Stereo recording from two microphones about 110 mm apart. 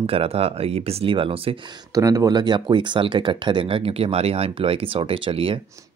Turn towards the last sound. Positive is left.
turn(degrees=-55)  # may be behind; listen again after turning